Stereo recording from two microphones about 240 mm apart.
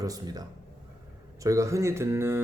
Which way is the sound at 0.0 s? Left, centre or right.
Centre.